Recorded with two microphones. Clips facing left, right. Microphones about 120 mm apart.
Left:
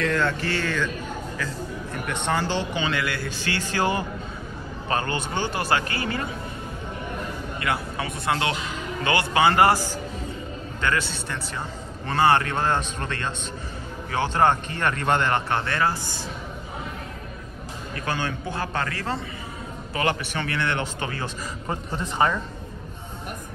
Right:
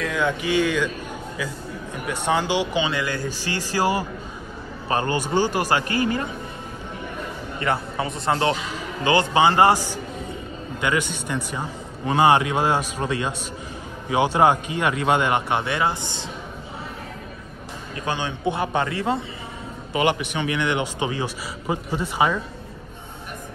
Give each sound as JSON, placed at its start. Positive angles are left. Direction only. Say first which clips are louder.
{"t": 0.0, "sound": "speech", "louder": "even", "side_deg": -10}
{"t": 2.0, "sound": "speech", "louder": "right 3 dB", "side_deg": -10}
{"t": 4.8, "sound": "a man's voice", "louder": "right 3 dB", "side_deg": -25}
{"t": 7.6, "sound": "speech", "louder": "right 4 dB", "side_deg": -30}
{"t": 9.0, "sound": "a man's voice", "louder": "right 3 dB", "side_deg": -20}
{"t": 18.0, "sound": "a man's voice", "louder": "right 4 dB", "side_deg": -20}